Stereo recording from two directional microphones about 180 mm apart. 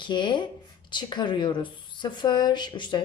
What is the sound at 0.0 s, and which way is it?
Speech, 25° left (ahead or behind).